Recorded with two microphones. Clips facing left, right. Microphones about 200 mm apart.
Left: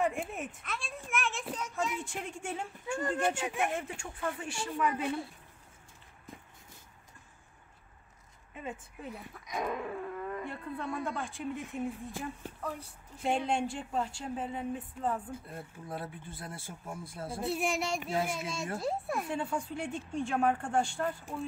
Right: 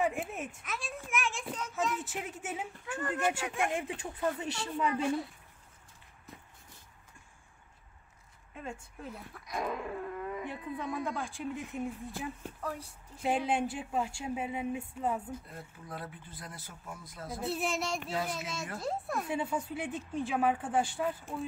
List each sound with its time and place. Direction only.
0.0 s a sound: centre (ahead or behind)
2.0 s speech: 5° right (ahead or behind)
3.4 s speech: 20° left (ahead or behind)
3.7 s speech: 15° right (ahead or behind)
8.5 s speech: centre (ahead or behind)
15.3 s speech: 25° left (ahead or behind)
17.6 s speech: centre (ahead or behind)
18.1 s speech: 25° left (ahead or behind)
18.8 s speech: centre (ahead or behind)